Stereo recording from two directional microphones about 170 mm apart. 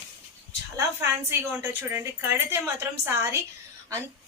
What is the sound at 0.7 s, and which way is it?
A woman's voice, 15° right (ahead or behind).